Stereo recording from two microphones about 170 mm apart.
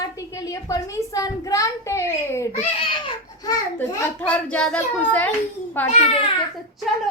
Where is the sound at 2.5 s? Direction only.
30° left (ahead or behind).